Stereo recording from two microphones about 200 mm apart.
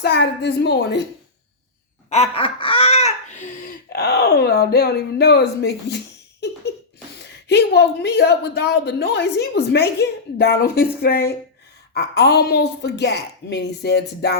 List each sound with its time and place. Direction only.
0.0 s speech: 55° left (ahead or behind)
2.0 s a sound: 30° left (ahead or behind); by 5.7 s 55° left (ahead or behind)
7.4 s speech: 55° left (ahead or behind)